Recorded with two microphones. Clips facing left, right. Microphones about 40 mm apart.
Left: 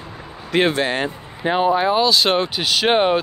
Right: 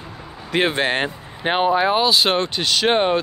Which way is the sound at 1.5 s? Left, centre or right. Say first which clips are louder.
Even; right.